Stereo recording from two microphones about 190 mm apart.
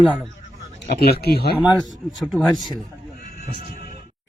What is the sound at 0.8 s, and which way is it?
Speech, 55° left (ahead or behind).